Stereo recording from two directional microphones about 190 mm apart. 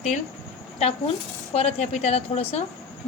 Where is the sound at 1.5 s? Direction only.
35° left (ahead or behind).